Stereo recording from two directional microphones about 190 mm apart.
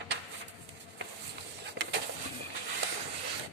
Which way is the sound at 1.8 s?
60° right (ahead or behind).